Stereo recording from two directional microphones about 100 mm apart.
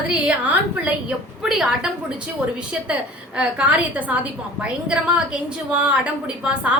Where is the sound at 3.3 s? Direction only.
10° right (ahead or behind).